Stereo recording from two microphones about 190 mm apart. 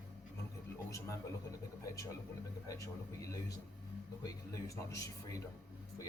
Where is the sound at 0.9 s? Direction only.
15° left (ahead or behind).